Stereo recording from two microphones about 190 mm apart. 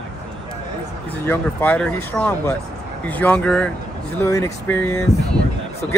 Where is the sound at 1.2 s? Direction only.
10° left (ahead or behind).